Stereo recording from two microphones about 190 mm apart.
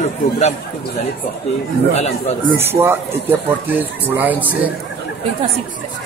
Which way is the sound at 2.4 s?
10° right (ahead or behind).